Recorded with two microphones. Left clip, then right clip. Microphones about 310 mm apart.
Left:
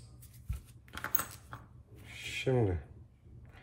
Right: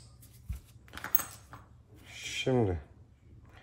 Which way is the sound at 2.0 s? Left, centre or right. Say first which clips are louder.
Right 2 dB; centre.